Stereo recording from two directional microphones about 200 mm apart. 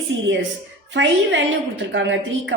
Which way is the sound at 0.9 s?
65° right (ahead or behind).